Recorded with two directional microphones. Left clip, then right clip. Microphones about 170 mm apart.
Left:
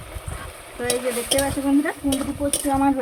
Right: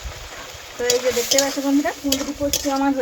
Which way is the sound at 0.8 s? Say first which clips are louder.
Right 5 dB; 5° right (ahead or behind).